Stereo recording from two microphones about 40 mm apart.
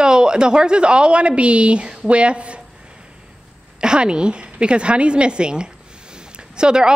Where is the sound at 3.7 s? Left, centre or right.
Right.